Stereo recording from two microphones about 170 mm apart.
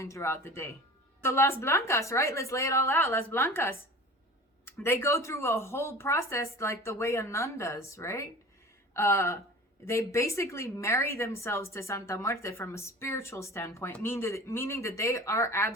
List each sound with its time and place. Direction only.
0.0 s a woman's voice: 15° left (ahead or behind)